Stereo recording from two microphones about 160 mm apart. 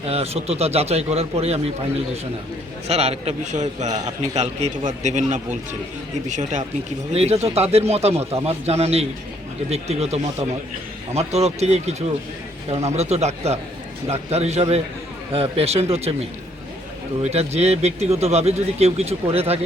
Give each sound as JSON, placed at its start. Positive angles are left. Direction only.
{"t": 0.0, "sound": "speech", "side_deg": -40}
{"t": 2.8, "sound": "a man's voice", "side_deg": -40}
{"t": 17.2, "sound": "speech", "side_deg": -40}